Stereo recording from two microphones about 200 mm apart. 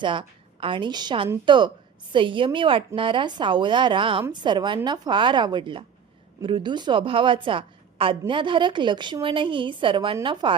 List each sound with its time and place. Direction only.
0.0 s a woman's voice: 25° right (ahead or behind)